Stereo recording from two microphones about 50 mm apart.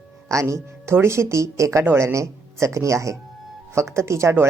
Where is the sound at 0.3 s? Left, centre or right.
Right.